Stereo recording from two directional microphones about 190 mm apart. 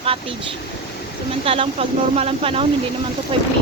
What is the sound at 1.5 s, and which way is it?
Speech, 30° right (ahead or behind).